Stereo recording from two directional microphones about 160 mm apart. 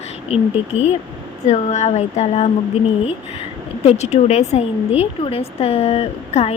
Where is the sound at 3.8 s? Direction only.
40° left (ahead or behind).